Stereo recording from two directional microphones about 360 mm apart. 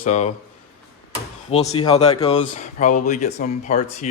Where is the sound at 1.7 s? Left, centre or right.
Centre.